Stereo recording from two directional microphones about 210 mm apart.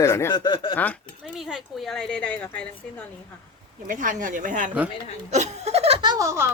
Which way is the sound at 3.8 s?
40° right (ahead or behind).